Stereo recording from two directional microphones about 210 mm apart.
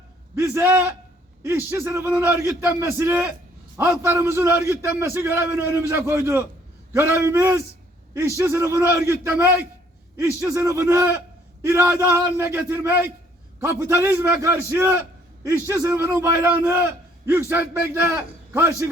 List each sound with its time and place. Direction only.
0.3 s a man's voice: 10° right (ahead or behind)